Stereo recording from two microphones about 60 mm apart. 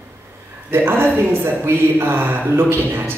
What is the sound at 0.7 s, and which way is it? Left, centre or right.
Speech, right.